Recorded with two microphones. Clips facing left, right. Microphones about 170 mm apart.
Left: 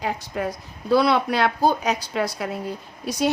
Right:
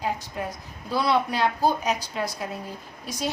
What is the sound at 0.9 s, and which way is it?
A woman's voice, 70° left (ahead or behind).